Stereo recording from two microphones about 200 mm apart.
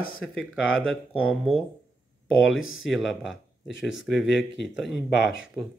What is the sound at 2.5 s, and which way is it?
Speech, 85° left.